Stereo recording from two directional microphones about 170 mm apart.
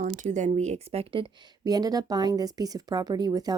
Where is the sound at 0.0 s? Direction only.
50° right (ahead or behind).